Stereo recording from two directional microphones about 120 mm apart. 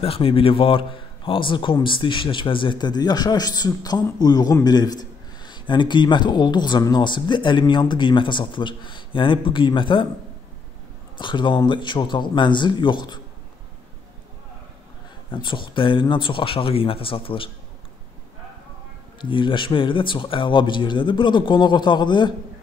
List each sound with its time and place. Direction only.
0.0 s a man's voice: 50° left (ahead or behind)
11.1 s a man's voice: 40° left (ahead or behind)
15.3 s a man's voice: 40° left (ahead or behind)
19.2 s a man's voice: 45° left (ahead or behind)